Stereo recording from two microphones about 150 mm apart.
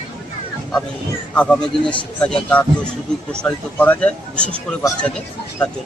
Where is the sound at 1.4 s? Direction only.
5° left (ahead or behind).